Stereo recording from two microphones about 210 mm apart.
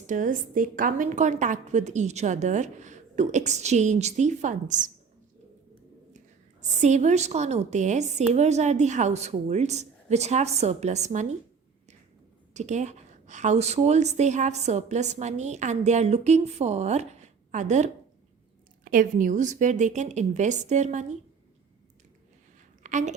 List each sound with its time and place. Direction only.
0.1 s a woman's voice: 40° right (ahead or behind)
6.1 s a woman's voice: 35° right (ahead or behind)
12.5 s a woman's voice: 35° right (ahead or behind)
22.8 s a woman's voice: 35° right (ahead or behind)